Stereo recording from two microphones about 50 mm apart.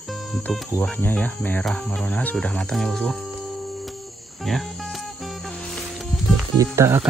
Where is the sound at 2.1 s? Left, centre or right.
Left.